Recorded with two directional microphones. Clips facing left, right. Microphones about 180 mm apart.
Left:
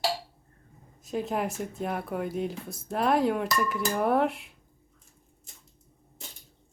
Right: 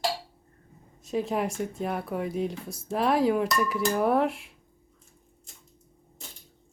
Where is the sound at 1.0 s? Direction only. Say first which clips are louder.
Right 2 dB; centre (ahead or behind).